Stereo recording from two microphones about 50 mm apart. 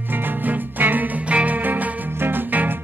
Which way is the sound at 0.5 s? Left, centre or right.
Right.